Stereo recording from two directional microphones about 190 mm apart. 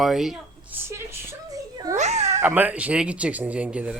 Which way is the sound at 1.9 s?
35° right (ahead or behind).